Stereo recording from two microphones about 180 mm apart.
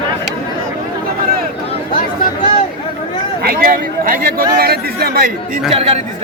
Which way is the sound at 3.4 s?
50° right (ahead or behind).